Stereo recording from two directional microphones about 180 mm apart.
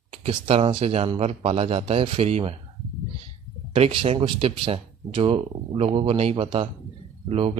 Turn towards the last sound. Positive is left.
turn(degrees=-35)  # may be behind; listen again after turning